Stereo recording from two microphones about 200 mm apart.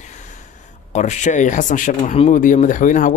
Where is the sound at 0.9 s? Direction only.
35° left (ahead or behind).